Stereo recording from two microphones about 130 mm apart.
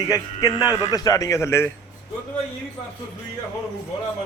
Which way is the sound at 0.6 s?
15° right (ahead or behind).